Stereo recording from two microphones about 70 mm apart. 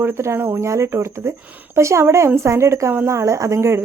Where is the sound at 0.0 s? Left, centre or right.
Right.